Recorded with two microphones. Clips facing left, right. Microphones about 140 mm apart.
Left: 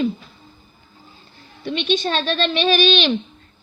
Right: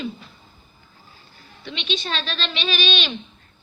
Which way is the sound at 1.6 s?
50° left (ahead or behind).